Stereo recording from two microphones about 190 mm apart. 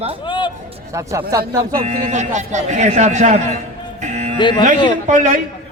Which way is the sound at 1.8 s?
35° right (ahead or behind).